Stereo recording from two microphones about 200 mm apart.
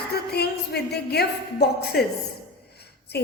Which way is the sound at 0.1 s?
55° left (ahead or behind).